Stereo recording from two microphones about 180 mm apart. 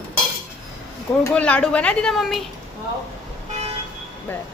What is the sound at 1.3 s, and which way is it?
A woman's voice, 5° left (ahead or behind).